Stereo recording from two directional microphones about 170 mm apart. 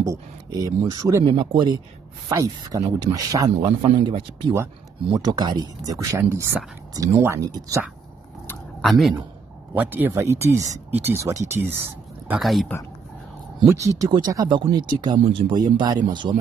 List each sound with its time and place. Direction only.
0.0 s a man's voice: 20° right (ahead or behind)
8.8 s speech: centre (ahead or behind)
9.8 s speech: 10° right (ahead or behind)
12.3 s speech: centre (ahead or behind)
13.7 s speech: 20° right (ahead or behind)